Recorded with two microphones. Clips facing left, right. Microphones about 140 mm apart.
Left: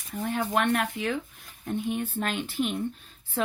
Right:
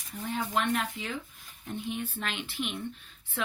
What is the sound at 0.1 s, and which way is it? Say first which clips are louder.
Speech: left 4 dB; 55° left (ahead or behind).